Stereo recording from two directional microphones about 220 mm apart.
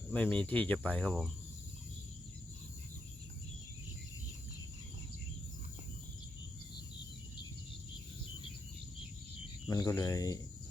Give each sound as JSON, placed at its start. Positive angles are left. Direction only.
{"t": 0.1, "sound": "speech", "side_deg": 5}
{"t": 9.6, "sound": "speech", "side_deg": 15}